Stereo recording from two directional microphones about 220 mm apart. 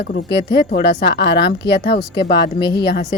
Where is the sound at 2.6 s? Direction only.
20° left (ahead or behind).